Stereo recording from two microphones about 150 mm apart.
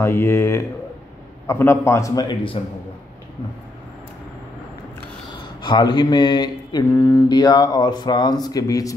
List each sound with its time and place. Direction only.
0.0 s a man's voice: 15° left (ahead or behind); by 2.6 s 35° left (ahead or behind)
5.4 s a sound: 30° left (ahead or behind)
6.9 s speech: 20° left (ahead or behind)